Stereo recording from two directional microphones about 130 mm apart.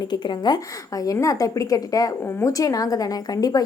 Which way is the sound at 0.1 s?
35° left (ahead or behind).